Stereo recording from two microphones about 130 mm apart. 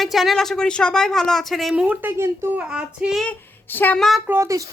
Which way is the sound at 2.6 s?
10° right (ahead or behind).